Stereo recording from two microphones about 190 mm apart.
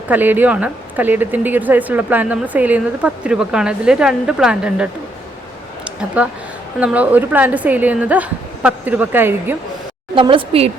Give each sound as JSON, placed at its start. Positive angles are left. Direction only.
{"t": 0.1, "sound": "speech", "side_deg": -10}
{"t": 6.2, "sound": "speech", "side_deg": -5}
{"t": 10.2, "sound": "a woman's voice", "side_deg": -25}